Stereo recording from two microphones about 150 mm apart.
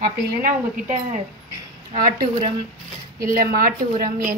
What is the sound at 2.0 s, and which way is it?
A woman's voice, 65° right (ahead or behind).